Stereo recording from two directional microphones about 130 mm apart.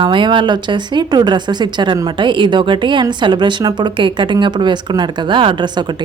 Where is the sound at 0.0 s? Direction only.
40° right (ahead or behind).